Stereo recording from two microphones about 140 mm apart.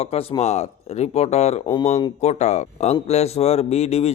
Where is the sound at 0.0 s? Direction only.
45° left (ahead or behind).